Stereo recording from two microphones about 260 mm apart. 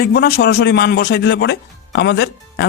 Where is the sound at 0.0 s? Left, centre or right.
Left.